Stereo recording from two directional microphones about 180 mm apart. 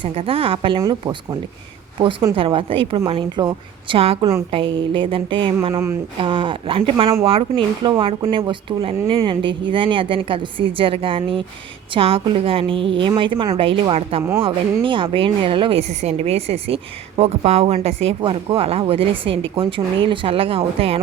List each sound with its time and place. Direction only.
0.0 s a woman's voice: 30° right (ahead or behind)
5.7 s speech: 15° right (ahead or behind)
6.1 s a woman's voice: 30° right (ahead or behind)